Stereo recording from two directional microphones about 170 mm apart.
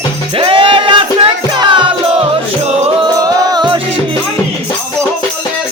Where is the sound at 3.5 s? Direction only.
25° right (ahead or behind).